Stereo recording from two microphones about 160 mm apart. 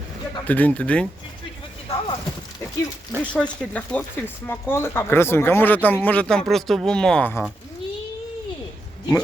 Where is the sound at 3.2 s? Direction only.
5° left (ahead or behind).